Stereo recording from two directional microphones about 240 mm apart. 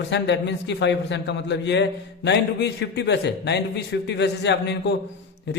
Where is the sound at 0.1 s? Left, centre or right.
Left.